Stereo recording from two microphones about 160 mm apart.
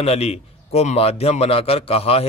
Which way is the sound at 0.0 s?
40° left (ahead or behind).